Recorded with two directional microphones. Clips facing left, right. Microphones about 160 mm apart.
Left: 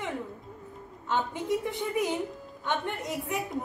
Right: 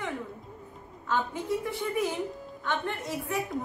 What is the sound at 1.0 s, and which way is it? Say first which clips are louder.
A woman's voice: left 1 dB; 20° left (ahead or behind).